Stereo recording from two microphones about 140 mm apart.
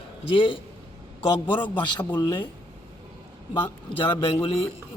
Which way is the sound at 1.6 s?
35° left (ahead or behind).